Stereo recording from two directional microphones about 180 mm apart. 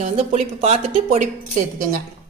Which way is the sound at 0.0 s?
40° right (ahead or behind).